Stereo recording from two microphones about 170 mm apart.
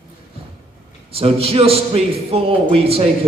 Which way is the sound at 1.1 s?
35° right (ahead or behind).